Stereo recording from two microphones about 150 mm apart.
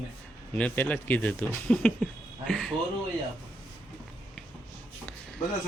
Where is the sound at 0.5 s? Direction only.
10° left (ahead or behind).